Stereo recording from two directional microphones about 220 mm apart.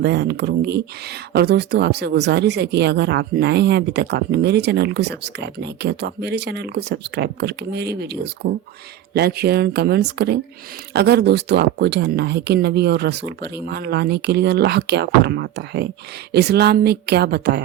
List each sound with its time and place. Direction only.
0.0 s speech: 50° right (ahead or behind)